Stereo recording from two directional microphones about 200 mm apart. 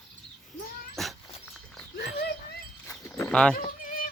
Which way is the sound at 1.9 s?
55° left (ahead or behind).